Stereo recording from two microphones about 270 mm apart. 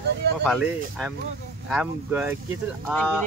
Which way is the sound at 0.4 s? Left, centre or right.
Centre.